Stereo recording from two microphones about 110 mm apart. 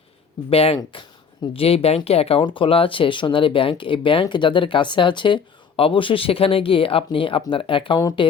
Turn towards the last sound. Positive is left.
turn(degrees=50)  # may be behind; listen again after turning